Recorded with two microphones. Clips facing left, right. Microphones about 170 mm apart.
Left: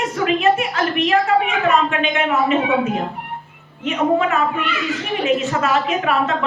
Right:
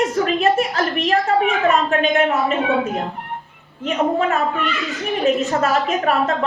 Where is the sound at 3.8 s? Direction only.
40° right (ahead or behind).